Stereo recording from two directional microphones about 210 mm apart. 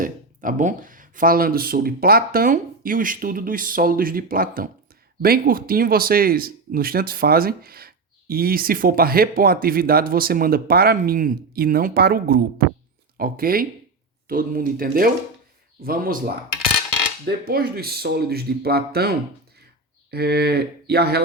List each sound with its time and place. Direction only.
0.0 s speech: 40° right (ahead or behind)